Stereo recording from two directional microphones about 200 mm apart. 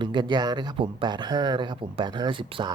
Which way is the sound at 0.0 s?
25° right (ahead or behind).